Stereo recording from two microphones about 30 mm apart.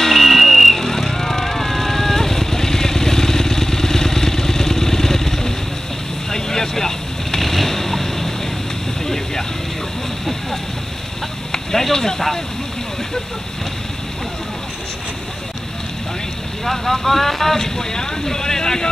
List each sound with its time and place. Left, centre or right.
0.0 s vehicle: centre
0.7 s vehicle: centre
7.4 s boat: centre
9.0 s vehicle: centre
11.5 s a sound: centre
16.6 s boat: centre